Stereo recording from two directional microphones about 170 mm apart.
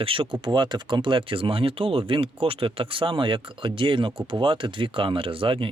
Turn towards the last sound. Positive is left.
turn(degrees=-30)  # may be behind; listen again after turning